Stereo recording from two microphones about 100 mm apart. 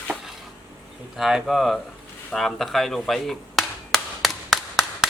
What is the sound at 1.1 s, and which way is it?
Speech, 5° right (ahead or behind).